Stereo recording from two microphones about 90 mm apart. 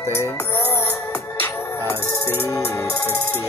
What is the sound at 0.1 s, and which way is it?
Music, 30° left (ahead or behind).